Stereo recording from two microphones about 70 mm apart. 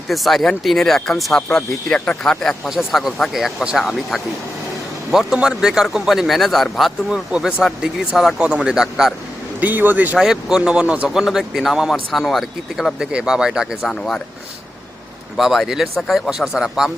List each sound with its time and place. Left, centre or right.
0.1 s a man's voice: centre
2.6 s a man's voice: centre
7.3 s speech: centre
8.4 s speech: centre
9.6 s speech: right
10.2 s a man's voice: centre
13.0 s speech: centre
13.9 s speech: centre
15.4 s a man's voice: centre